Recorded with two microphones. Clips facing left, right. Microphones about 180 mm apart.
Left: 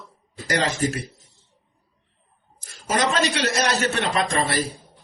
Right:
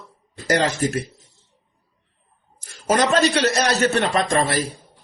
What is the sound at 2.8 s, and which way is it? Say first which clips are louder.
Speech: right 4 dB; 45° right (ahead or behind).